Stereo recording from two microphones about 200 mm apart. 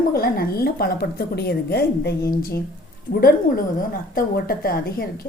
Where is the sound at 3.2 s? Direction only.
45° left (ahead or behind).